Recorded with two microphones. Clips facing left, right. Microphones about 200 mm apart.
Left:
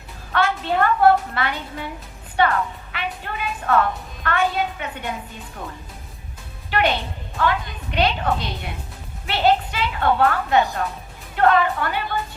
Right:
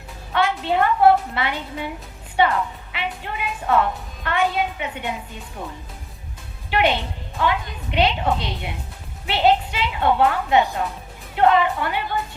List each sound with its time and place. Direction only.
0.3 s a woman's voice: 15° right (ahead or behind)
6.7 s a woman's voice: 20° right (ahead or behind)